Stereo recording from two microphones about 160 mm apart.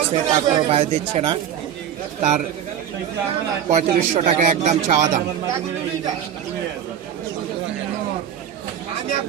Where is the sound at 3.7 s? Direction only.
50° right (ahead or behind).